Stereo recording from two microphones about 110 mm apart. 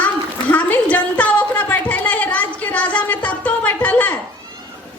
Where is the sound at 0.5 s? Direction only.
15° left (ahead or behind).